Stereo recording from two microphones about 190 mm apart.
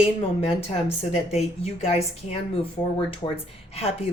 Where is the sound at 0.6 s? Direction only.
35° left (ahead or behind).